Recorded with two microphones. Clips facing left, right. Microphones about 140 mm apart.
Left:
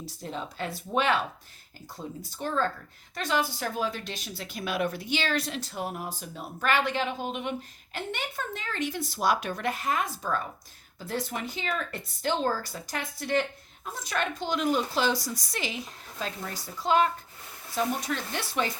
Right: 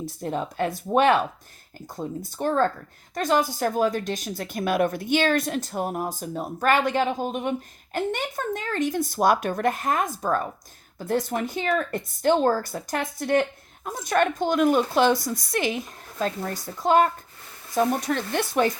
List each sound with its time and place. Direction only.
0.2 s speech: 50° right (ahead or behind)